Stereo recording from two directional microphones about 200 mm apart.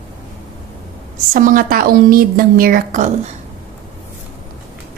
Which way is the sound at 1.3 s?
45° right (ahead or behind).